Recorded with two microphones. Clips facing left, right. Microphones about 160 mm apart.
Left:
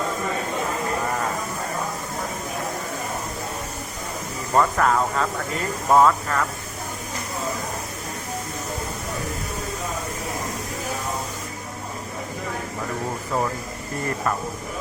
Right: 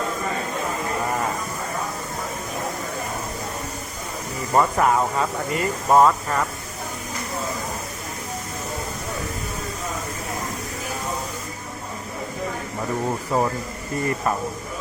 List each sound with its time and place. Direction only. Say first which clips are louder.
4.5 s speech: right 1 dB; 10° right (ahead or behind)
13.3 s speech: right 3 dB; 15° right (ahead or behind)